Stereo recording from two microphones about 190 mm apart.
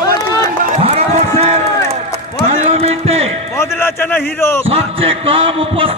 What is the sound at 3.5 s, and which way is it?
A man's voice, 15° left (ahead or behind).